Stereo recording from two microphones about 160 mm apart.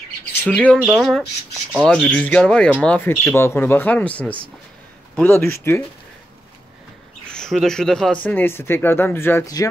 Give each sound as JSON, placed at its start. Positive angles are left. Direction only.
{"t": 0.5, "sound": "speech", "side_deg": 10}
{"t": 0.8, "sound": "speech", "side_deg": 0}
{"t": 7.3, "sound": "speech", "side_deg": 5}